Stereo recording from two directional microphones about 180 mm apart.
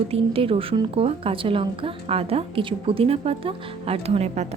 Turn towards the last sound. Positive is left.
turn(degrees=-40)  # may be behind; listen again after turning